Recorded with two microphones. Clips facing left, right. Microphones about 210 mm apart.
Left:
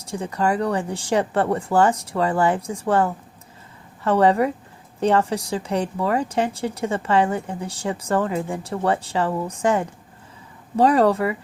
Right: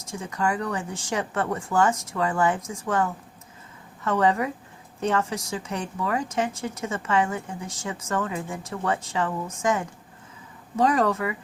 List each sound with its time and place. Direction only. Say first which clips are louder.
0.1 s speech: left 5 dB; 35° left (ahead or behind)